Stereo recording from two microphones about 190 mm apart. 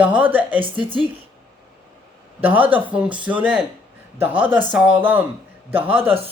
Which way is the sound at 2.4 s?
10° right (ahead or behind).